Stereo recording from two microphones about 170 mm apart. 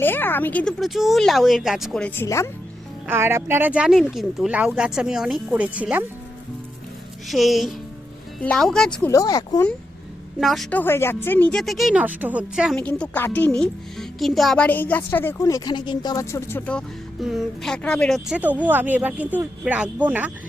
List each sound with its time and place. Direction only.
0.0 s speech: 10° left (ahead or behind)
3.1 s speech: 15° right (ahead or behind)
7.3 s speech: centre (ahead or behind)
9.0 s speech: 20° left (ahead or behind)
10.4 s speech: centre (ahead or behind)
12.8 s speech: 10° left (ahead or behind); by 20.3 s 10° right (ahead or behind)